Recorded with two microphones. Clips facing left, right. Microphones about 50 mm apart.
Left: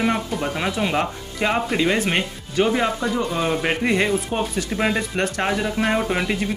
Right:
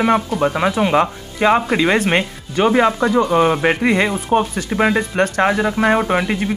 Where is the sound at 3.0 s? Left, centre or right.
Right.